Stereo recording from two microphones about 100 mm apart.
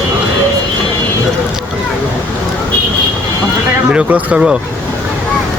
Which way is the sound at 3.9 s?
10° right (ahead or behind).